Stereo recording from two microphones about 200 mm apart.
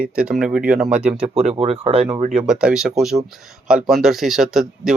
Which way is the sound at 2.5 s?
5° right (ahead or behind).